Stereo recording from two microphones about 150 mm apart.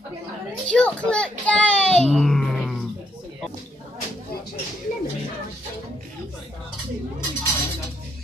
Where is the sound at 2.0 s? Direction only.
Centre (ahead or behind).